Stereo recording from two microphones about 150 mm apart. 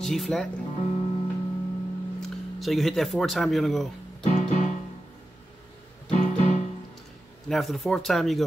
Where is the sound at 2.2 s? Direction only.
Centre (ahead or behind).